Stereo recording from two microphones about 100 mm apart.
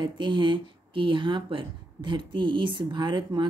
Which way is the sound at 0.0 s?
50° right (ahead or behind).